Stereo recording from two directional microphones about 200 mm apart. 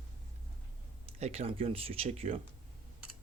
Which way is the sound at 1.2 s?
30° right (ahead or behind).